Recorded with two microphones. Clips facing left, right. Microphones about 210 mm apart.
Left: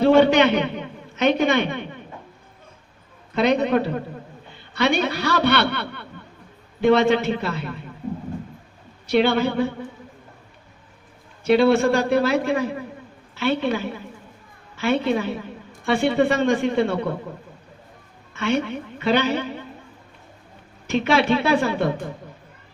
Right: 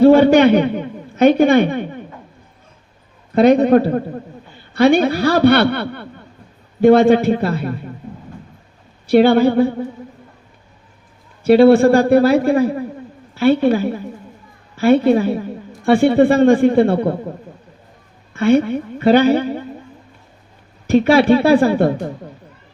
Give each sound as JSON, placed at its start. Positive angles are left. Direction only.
{"t": 0.0, "sound": "a man's voice", "side_deg": -55}
{"t": 3.3, "sound": "a man's voice", "side_deg": -50}
{"t": 9.0, "sound": "a man's voice", "side_deg": -50}
{"t": 11.4, "sound": "a man's voice", "side_deg": -50}
{"t": 18.3, "sound": "a man's voice", "side_deg": -50}
{"t": 20.9, "sound": "a man's voice", "side_deg": -55}